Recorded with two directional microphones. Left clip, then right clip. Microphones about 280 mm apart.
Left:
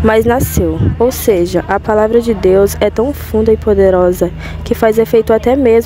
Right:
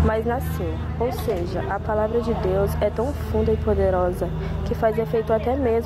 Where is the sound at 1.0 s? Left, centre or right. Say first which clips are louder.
Left 13 dB; left.